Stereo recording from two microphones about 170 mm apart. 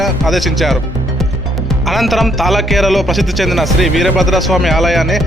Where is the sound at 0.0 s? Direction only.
Centre (ahead or behind).